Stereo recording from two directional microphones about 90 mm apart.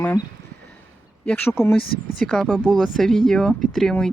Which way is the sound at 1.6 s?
5° left (ahead or behind).